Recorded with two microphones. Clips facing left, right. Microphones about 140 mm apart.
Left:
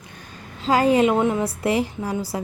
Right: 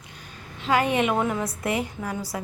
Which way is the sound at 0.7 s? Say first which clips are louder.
Left 5 dB; 35° left (ahead or behind).